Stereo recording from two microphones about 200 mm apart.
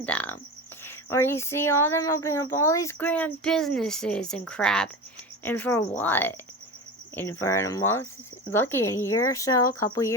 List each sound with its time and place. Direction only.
0.0 s cricket: 5° left (ahead or behind)
0.9 s speech: 10° left (ahead or behind)